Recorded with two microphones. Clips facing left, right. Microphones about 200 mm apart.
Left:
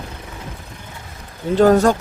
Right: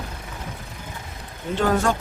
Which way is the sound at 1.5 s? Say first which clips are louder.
Left 8 dB; 40° left (ahead or behind).